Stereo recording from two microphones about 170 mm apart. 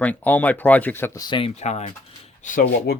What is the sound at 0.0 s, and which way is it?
Speech, 10° left (ahead or behind).